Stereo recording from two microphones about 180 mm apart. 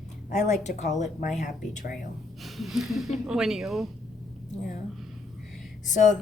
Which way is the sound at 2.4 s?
Centre (ahead or behind).